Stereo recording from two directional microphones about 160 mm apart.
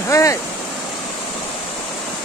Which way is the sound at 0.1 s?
20° left (ahead or behind).